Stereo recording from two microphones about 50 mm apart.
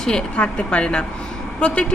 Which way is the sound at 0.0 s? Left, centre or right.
Centre.